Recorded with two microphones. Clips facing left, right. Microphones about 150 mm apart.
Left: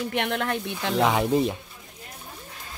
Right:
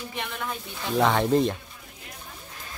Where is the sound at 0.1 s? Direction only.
70° left (ahead or behind).